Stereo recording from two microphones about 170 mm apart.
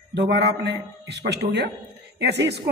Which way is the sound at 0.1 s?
80° right.